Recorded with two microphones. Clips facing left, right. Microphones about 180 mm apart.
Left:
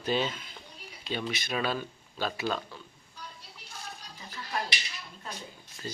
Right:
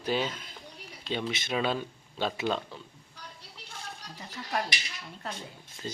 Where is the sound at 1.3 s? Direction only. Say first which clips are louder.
Right 2 dB; 20° right (ahead or behind).